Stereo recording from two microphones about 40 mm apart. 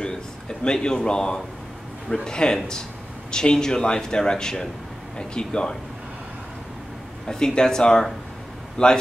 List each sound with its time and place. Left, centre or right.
0.0 s a sound: centre
2.2 s a man's voice: centre
7.2 s a man's voice: centre